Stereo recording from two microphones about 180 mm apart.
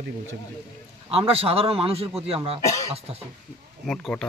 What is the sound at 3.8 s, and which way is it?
Speech, 5° left (ahead or behind).